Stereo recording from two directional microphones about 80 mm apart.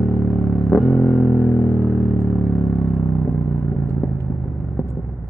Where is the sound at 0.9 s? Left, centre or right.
Left.